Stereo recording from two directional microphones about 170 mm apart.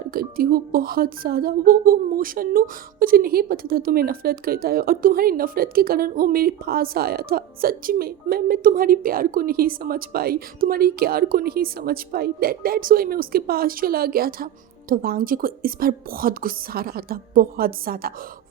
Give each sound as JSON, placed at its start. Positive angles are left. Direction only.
{"t": 0.1, "sound": "speech", "side_deg": -60}